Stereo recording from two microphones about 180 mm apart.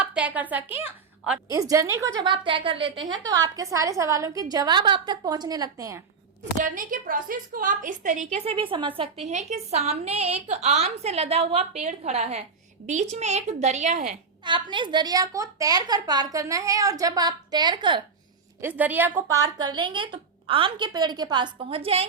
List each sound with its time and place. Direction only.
0.0 s a woman's voice: 5° right (ahead or behind)
6.6 s a woman's voice: 50° right (ahead or behind); by 9.0 s 30° right (ahead or behind)
9.2 s a woman's voice: 40° right (ahead or behind)
14.4 s a woman's voice: 25° right (ahead or behind)
18.6 s a woman's voice: 10° right (ahead or behind); by 22.0 s 30° right (ahead or behind)